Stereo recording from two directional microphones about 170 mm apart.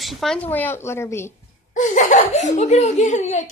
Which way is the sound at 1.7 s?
50° left (ahead or behind).